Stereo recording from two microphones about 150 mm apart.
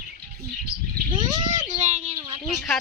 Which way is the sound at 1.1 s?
30° right (ahead or behind).